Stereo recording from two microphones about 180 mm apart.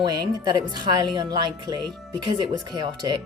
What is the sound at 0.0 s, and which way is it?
A woman's voice, 20° right (ahead or behind).